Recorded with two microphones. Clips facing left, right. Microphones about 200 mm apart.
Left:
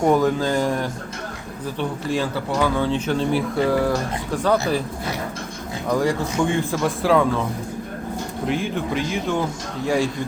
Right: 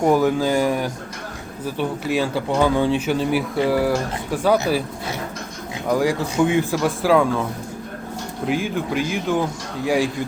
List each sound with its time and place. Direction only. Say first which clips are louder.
0.0 s speech: right 1 dB; 5° right (ahead or behind)
5.9 s a man's voice: right 1 dB; centre (ahead or behind)
8.4 s a man's voice: right 2 dB; centre (ahead or behind)